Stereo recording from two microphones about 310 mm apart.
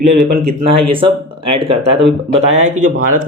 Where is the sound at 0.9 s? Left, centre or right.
Centre.